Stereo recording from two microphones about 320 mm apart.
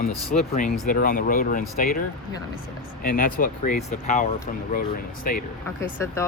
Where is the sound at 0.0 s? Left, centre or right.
Left.